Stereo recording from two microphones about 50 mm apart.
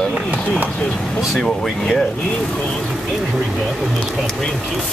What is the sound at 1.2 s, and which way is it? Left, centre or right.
Speech, centre.